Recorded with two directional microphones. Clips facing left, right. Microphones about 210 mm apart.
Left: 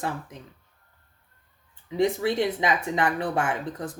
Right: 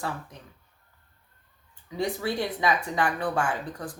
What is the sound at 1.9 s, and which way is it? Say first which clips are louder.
Speech: left 5 dB; 20° left (ahead or behind).